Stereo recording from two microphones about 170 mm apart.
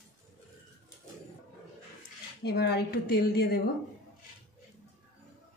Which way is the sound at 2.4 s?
70° left (ahead or behind).